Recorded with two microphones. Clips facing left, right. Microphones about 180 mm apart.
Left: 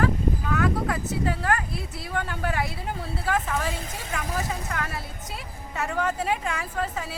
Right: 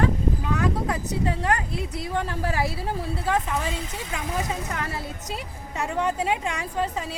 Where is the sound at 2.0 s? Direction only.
30° right (ahead or behind).